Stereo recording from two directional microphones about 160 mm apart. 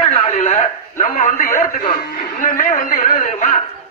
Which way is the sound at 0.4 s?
40° left (ahead or behind).